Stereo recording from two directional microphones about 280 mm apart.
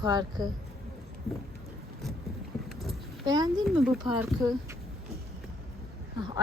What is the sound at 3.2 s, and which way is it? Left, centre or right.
Speech, centre.